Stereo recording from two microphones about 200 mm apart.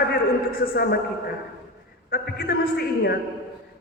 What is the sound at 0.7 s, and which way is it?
Speech, 50° left (ahead or behind).